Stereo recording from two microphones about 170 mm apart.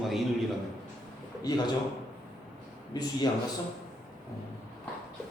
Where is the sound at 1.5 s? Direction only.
25° left (ahead or behind).